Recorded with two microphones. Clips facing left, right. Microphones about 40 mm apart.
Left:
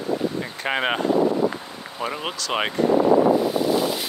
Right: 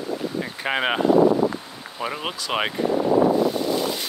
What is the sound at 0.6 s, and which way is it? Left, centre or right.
Speech, centre.